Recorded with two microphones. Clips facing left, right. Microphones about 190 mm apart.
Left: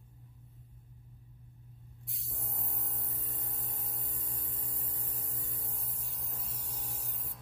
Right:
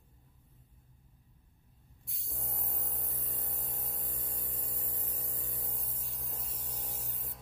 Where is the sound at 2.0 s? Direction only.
Centre (ahead or behind).